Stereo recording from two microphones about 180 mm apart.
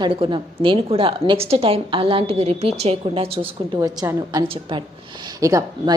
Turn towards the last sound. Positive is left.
turn(degrees=-20)  # may be behind; listen again after turning